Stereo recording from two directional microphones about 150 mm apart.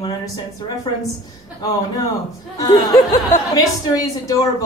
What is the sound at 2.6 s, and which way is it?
A woman's voice, 25° left (ahead or behind).